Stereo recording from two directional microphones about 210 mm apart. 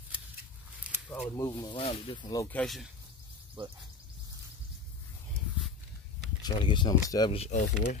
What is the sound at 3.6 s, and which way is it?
Speech, 25° right (ahead or behind).